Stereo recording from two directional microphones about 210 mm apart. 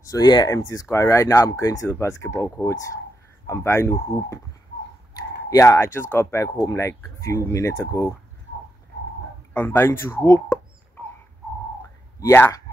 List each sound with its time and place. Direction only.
0.1 s speech: 20° left (ahead or behind)
5.5 s speech: 15° left (ahead or behind)
9.5 s speech: 10° left (ahead or behind)
12.2 s speech: 10° left (ahead or behind)